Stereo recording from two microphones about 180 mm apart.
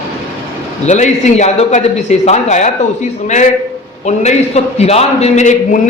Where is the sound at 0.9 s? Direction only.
40° left (ahead or behind).